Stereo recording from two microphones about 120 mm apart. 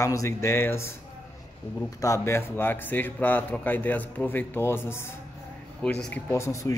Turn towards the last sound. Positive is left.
turn(degrees=25)  # may be behind; listen again after turning